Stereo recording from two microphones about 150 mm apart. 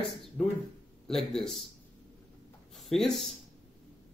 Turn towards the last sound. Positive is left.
turn(degrees=0)  # may be behind; listen again after turning